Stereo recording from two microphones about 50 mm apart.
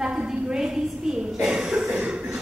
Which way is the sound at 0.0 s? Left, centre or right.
Centre.